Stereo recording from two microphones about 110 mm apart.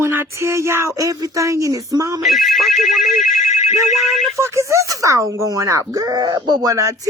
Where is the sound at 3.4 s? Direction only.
90° left.